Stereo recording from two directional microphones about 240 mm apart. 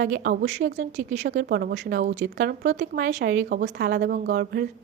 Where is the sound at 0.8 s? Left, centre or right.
Right.